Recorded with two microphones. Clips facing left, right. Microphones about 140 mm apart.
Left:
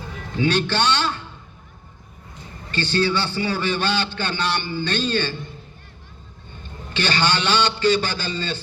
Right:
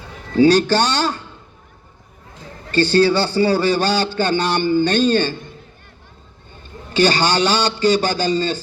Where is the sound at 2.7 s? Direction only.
35° right (ahead or behind).